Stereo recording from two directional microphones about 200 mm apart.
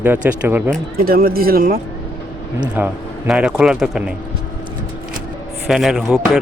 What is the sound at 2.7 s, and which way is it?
Speech, 5° right (ahead or behind).